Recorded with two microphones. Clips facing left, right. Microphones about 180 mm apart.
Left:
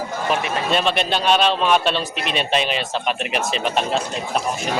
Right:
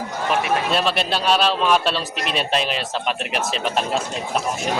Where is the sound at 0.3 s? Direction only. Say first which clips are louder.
Right 1 dB; centre (ahead or behind).